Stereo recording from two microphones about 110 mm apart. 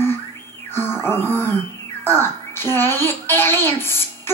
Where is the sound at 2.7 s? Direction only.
20° left (ahead or behind).